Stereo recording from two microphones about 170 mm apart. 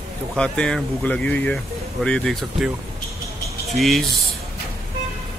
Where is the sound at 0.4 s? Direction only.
5° left (ahead or behind).